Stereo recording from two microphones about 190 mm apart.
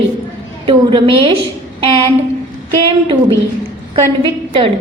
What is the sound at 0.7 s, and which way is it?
Speech, 25° right (ahead or behind).